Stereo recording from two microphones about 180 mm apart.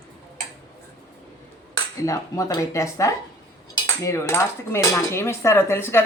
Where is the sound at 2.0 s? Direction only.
15° left (ahead or behind).